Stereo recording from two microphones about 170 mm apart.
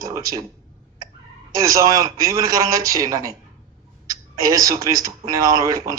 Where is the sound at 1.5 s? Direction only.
20° right (ahead or behind).